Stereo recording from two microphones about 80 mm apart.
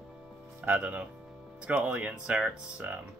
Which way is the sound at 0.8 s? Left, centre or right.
Centre.